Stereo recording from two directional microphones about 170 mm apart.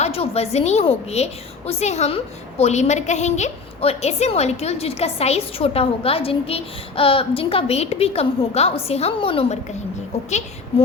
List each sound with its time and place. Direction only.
0.0 s a woman's voice: 35° left (ahead or behind)